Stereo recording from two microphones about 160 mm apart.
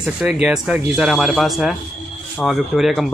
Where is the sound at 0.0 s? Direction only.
5° right (ahead or behind).